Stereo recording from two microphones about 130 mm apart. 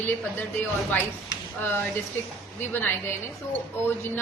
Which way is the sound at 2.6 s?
15° left (ahead or behind).